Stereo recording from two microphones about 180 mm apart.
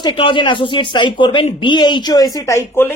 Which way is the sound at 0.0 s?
30° left (ahead or behind).